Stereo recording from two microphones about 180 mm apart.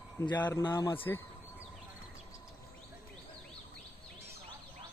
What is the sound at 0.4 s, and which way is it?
Speech, 25° left (ahead or behind).